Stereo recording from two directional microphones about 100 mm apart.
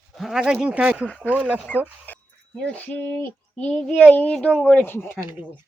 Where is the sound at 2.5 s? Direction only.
15° left (ahead or behind).